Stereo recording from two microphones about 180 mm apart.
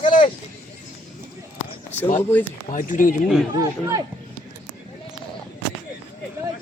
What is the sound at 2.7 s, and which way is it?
Speech, 45° left (ahead or behind).